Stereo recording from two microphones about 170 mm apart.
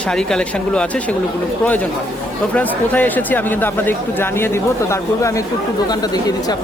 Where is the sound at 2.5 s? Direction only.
10° left (ahead or behind).